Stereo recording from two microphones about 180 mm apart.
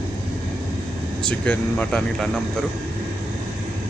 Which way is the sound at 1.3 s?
5° left (ahead or behind).